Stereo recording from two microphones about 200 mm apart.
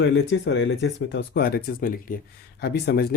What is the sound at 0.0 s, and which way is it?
Speech, 60° left (ahead or behind).